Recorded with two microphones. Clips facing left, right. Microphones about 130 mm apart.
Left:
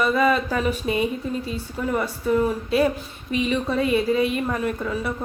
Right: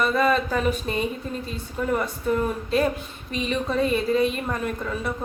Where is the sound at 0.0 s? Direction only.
5° left (ahead or behind).